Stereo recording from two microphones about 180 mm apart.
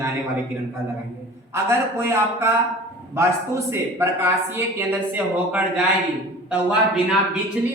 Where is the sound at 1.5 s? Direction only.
15° right (ahead or behind).